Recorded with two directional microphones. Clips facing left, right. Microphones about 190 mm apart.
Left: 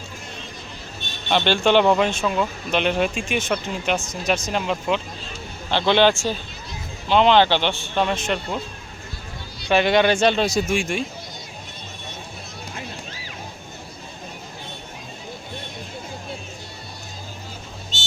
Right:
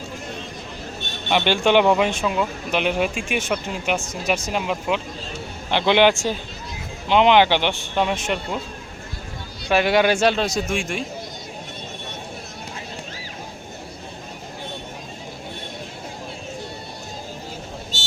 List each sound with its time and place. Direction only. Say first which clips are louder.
1.3 s speech: even; 15° right (ahead or behind)
9.6 s speech: even; 5° right (ahead or behind)